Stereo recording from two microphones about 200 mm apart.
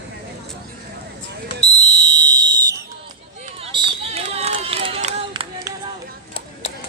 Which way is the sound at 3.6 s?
25° right (ahead or behind).